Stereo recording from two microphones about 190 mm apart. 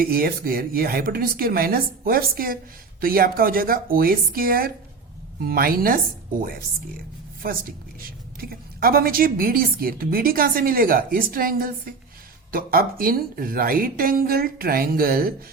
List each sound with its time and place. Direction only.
0.0 s a woman's voice: 50° right (ahead or behind)